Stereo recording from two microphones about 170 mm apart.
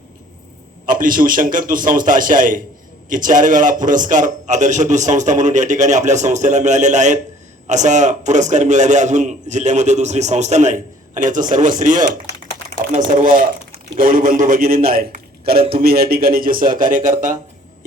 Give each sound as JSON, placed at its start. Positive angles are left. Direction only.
{"t": 0.9, "sound": "a man's voice", "side_deg": -55}